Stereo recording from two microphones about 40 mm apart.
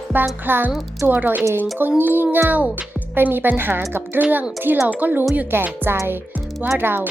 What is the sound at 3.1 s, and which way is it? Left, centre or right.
Speech, right.